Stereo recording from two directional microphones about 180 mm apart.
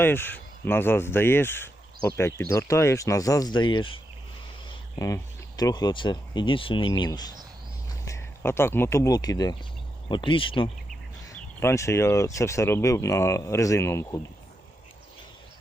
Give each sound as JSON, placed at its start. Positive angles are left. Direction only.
{"t": 0.0, "sound": "speech", "side_deg": 10}
{"t": 11.3, "sound": "speech", "side_deg": 15}